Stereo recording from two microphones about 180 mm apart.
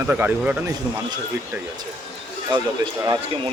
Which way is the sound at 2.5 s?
25° right (ahead or behind).